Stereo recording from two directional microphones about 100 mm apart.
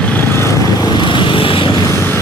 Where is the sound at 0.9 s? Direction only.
50° left (ahead or behind).